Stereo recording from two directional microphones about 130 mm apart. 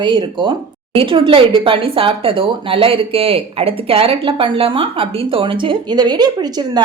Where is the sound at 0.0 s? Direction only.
35° right (ahead or behind).